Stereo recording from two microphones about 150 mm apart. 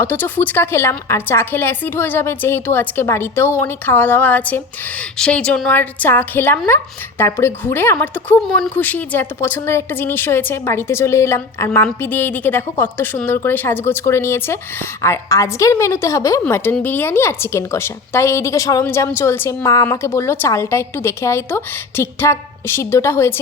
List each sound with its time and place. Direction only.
0.0 s speech: 15° left (ahead or behind)